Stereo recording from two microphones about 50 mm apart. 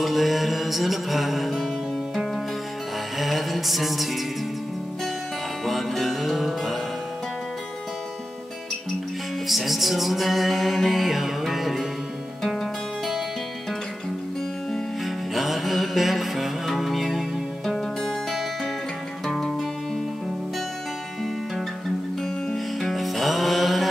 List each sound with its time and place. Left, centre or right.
0.0 s music: centre
3.2 s music: centre
5.7 s music: centre
9.5 s music: centre
15.0 s music: centre
22.5 s music: centre